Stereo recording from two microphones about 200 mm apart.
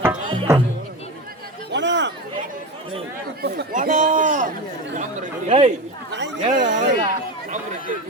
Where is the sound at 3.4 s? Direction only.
45° right (ahead or behind).